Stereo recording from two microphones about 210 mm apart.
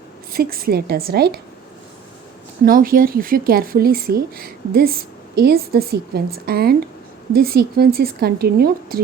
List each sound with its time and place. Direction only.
0.3 s speech: 45° right (ahead or behind)
2.6 s speech: 45° right (ahead or behind)